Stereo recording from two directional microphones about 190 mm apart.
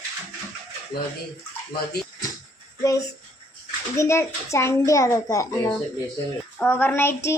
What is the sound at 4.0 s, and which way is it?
Speech, 15° left (ahead or behind).